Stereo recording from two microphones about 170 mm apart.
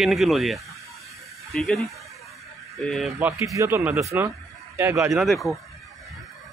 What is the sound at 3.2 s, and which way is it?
A man's voice, 20° right (ahead or behind).